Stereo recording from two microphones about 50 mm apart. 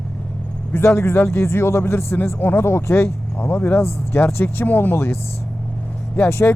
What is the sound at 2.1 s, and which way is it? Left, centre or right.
Speech, left.